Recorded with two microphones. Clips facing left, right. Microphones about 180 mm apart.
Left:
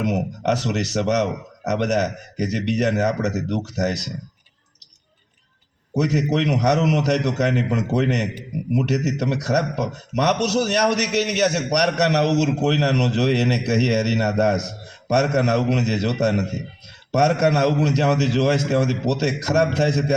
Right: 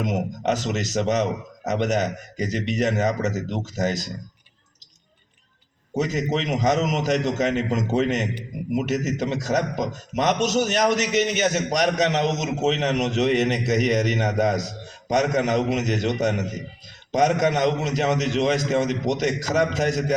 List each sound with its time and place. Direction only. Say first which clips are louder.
0.0 s speech: left 2 dB; 70° left (ahead or behind)
6.0 s speech: left 4 dB; 70° left (ahead or behind)